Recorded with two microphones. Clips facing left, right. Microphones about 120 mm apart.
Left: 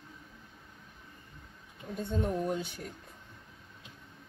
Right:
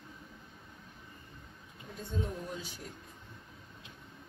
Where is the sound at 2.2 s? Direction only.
55° left (ahead or behind).